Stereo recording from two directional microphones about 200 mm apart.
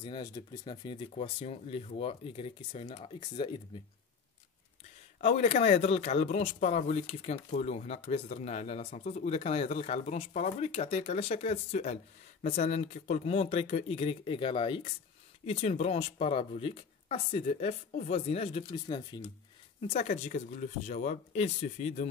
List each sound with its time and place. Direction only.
0.0 s speech: 25° left (ahead or behind)
5.2 s speech: 30° left (ahead or behind)
19.8 s speech: 30° left (ahead or behind)